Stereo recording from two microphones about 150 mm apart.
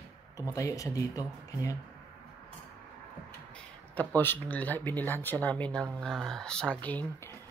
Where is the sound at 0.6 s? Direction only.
20° left (ahead or behind).